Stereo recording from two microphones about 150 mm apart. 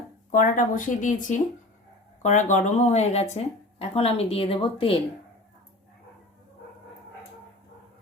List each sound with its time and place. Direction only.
0.3 s speech: 60° left (ahead or behind); by 4.9 s 35° left (ahead or behind)